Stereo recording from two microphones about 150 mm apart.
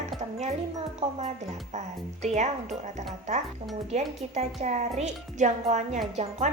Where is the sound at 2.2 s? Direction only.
50° right (ahead or behind).